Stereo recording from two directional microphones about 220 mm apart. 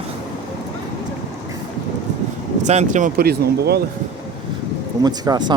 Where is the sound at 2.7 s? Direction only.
30° right (ahead or behind).